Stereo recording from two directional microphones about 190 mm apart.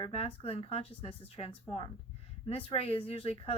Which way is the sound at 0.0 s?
30° left (ahead or behind).